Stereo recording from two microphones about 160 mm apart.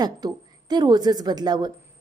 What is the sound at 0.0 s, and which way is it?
A woman's voice, 25° right (ahead or behind).